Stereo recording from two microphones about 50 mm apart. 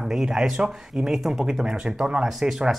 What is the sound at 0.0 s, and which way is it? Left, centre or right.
Speech, centre.